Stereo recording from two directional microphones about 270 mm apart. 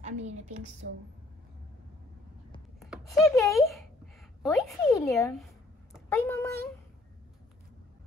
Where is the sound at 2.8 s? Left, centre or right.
Centre.